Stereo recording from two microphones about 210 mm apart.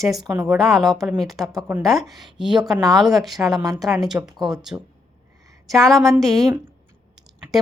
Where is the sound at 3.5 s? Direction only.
15° right (ahead or behind).